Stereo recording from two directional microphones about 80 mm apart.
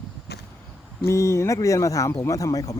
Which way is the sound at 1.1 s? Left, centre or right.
Left.